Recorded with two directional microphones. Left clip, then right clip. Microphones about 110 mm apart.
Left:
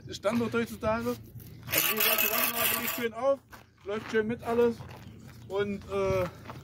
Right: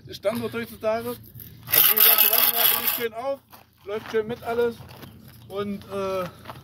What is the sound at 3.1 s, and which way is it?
Speech, 10° left (ahead or behind).